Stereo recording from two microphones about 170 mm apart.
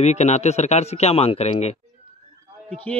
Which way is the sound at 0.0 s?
40° left (ahead or behind).